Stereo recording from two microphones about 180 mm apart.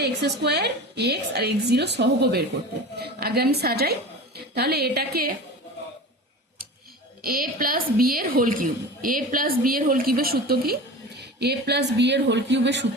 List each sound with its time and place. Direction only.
0.0 s a woman's voice: 65° right (ahead or behind)
7.2 s a woman's voice: 55° right (ahead or behind); by 12.8 s 80° right